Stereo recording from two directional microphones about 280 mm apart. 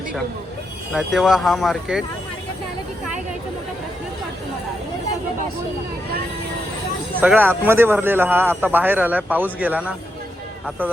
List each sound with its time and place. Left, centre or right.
0.9 s speech: centre
7.2 s a man's voice: centre